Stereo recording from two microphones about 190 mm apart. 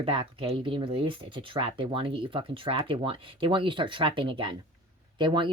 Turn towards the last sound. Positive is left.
turn(degrees=-25)  # may be behind; listen again after turning